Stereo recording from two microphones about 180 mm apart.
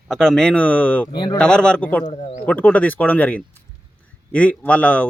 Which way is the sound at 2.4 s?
10° left (ahead or behind).